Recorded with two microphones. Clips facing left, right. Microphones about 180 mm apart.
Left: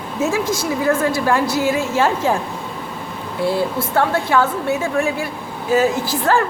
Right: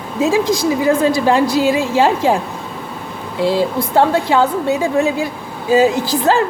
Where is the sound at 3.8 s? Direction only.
15° right (ahead or behind).